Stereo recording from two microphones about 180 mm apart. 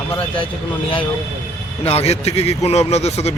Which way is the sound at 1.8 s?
35° left (ahead or behind).